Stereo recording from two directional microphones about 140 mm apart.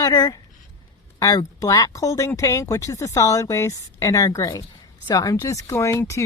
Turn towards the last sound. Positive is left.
turn(degrees=20)  # may be behind; listen again after turning